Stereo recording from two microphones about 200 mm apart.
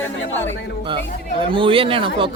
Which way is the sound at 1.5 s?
25° right (ahead or behind).